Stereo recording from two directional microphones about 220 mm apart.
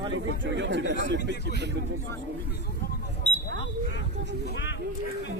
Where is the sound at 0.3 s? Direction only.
55° right (ahead or behind).